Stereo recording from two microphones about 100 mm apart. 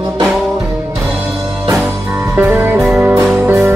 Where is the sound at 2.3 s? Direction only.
15° right (ahead or behind).